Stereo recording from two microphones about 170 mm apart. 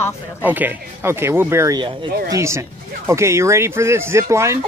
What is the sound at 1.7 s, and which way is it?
Speech, 30° right (ahead or behind).